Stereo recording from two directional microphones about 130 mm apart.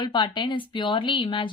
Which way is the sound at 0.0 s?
35° left (ahead or behind).